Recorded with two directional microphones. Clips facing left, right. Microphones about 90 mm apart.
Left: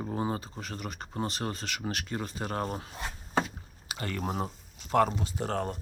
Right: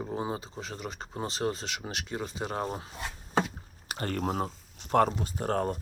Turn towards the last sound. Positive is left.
turn(degrees=-45)  # may be behind; listen again after turning